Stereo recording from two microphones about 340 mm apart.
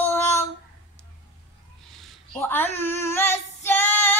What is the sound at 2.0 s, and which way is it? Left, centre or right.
Female singing, centre.